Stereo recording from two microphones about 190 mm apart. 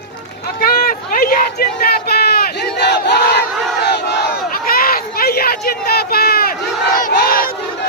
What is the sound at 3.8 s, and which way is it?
Battle cry, 60° left (ahead or behind).